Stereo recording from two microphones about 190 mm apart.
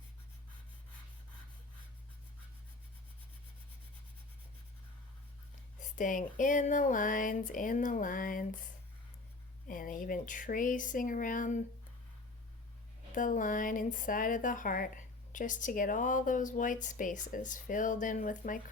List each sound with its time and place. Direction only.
5.8 s speech: 45° left (ahead or behind)
9.6 s speech: 45° left (ahead or behind)
13.1 s speech: 45° left (ahead or behind)